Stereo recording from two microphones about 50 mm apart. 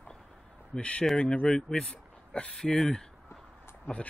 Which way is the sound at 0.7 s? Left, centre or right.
Left.